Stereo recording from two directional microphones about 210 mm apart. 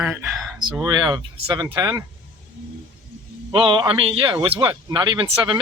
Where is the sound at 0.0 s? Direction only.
5° right (ahead or behind).